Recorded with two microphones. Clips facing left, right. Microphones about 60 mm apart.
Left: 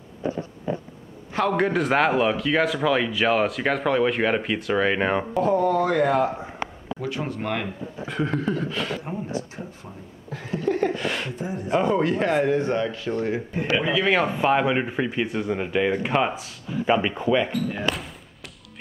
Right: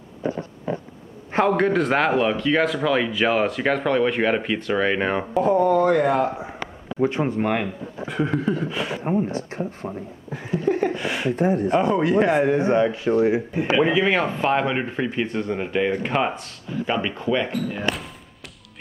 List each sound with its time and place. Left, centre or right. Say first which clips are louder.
1.5 s speech: even; centre
7.0 s speech: right 8 dB; right
8.1 s speech: right 2 dB; centre
9.3 s speech: right 3 dB; right
10.3 s speech: right 2 dB; centre
11.3 s speech: right 10 dB; right
11.7 s speech: left 3 dB; centre
14.0 s speech: even; centre